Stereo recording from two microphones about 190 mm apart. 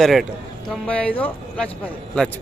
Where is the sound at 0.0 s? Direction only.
Centre (ahead or behind).